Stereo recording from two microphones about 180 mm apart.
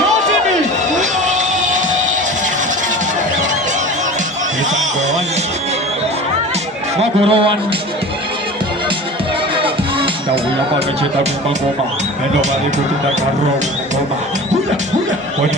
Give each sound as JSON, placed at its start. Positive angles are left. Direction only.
{"t": 0.9, "sound": "music", "side_deg": -45}
{"t": 6.9, "sound": "a sound", "side_deg": -35}
{"t": 9.6, "sound": "music", "side_deg": -30}